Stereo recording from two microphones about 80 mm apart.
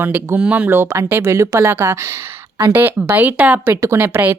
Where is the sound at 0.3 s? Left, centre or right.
Centre; by 2.0 s right.